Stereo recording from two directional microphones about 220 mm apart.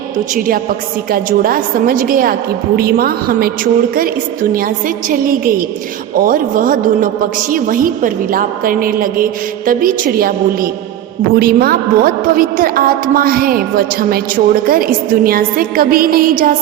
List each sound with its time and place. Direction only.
0.3 s a woman's voice: 40° right (ahead or behind)